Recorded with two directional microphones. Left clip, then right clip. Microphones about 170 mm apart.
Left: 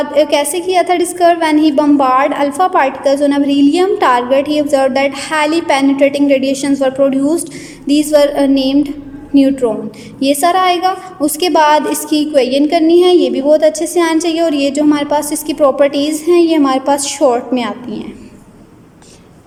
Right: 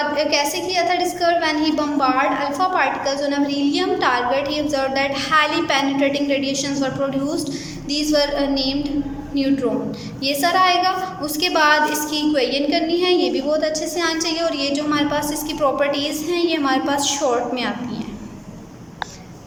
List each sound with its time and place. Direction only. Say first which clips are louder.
0.1 s a woman's voice: left 7 dB; 45° left (ahead or behind)